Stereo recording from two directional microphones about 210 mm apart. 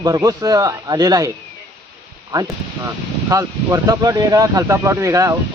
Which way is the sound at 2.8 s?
15° right (ahead or behind).